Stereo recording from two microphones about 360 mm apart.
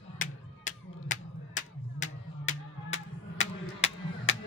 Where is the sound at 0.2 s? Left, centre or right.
Left.